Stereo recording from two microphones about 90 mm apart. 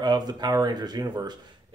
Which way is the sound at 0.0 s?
50° right (ahead or behind).